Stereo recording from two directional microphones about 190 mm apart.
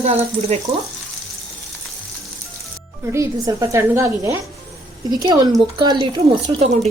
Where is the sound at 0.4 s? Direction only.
30° right (ahead or behind).